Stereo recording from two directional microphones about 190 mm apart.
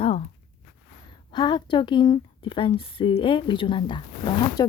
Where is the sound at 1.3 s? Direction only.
25° left (ahead or behind).